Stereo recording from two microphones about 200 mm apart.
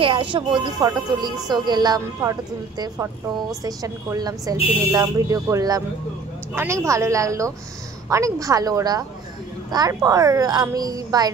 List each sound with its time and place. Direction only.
0.0 s speech: 25° right (ahead or behind)
3.6 s speech: 20° right (ahead or behind)